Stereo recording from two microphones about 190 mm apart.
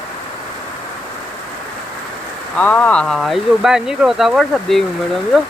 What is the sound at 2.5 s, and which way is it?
Speech, 10° left (ahead or behind).